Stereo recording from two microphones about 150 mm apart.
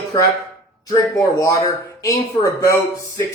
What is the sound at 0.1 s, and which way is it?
Speech, 25° left (ahead or behind).